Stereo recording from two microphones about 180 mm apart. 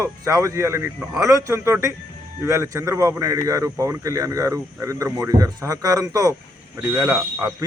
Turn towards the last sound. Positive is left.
turn(degrees=-15)  # may be behind; listen again after turning